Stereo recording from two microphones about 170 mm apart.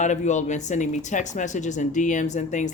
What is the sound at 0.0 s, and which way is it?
Speech, 45° left (ahead or behind).